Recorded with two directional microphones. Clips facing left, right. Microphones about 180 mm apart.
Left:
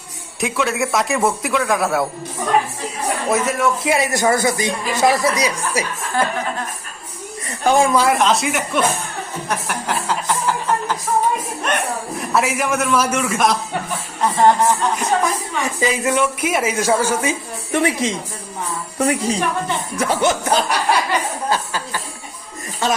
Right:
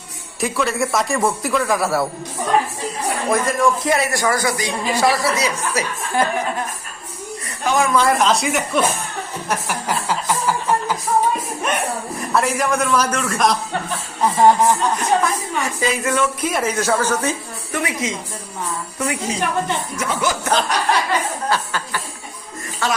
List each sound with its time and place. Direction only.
0.3 s a man's voice: centre (ahead or behind)
3.2 s a man's voice: 5° left (ahead or behind)
7.6 s speech: 30° left (ahead or behind)
7.9 s a man's voice: 5° left (ahead or behind)
9.5 s a sound: 5° right (ahead or behind)
11.6 s a man's voice: 5° right (ahead or behind)
14.2 s music: 10° right (ahead or behind)
15.2 s speech: 15° left (ahead or behind)
17.7 s speech: 30° left (ahead or behind)
20.4 s speech: 10° left (ahead or behind)
21.5 s a sound: 15° left (ahead or behind)
22.8 s a man's voice: 20° left (ahead or behind)